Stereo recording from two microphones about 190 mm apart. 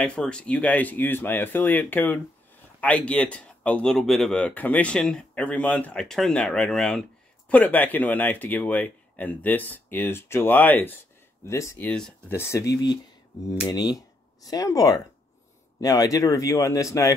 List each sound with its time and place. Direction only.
0.0 s speech: 5° left (ahead or behind)